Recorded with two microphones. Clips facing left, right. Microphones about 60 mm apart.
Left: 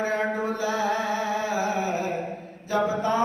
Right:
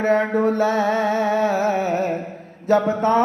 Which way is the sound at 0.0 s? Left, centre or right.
Right.